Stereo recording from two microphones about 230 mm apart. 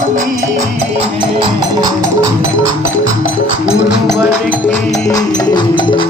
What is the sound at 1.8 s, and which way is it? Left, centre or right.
Music, centre.